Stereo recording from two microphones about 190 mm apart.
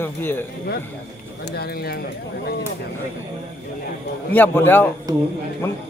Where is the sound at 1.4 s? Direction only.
55° left (ahead or behind).